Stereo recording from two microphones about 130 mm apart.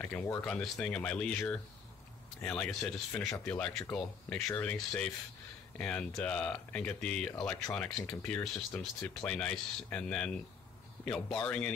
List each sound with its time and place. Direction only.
0.0 s speech: 20° left (ahead or behind)
0.5 s speech: 10° left (ahead or behind)
2.4 s speech: 10° left (ahead or behind)